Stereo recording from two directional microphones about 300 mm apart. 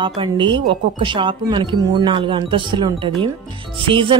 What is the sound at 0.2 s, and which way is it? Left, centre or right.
Speech, centre.